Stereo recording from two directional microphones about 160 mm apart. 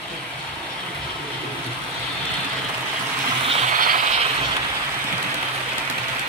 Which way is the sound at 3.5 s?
50° right (ahead or behind).